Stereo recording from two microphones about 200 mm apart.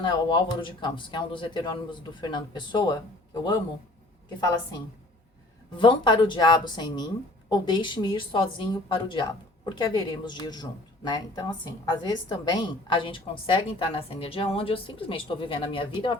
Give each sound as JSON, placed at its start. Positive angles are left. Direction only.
{"t": 0.0, "sound": "a woman's voice", "side_deg": 20}
{"t": 5.7, "sound": "a woman's voice", "side_deg": 25}